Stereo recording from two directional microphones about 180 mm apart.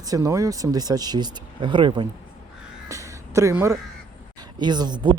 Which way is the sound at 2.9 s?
15° right (ahead or behind).